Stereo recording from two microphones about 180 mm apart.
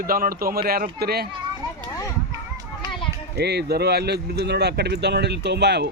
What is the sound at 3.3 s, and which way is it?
Speech, 65° right (ahead or behind).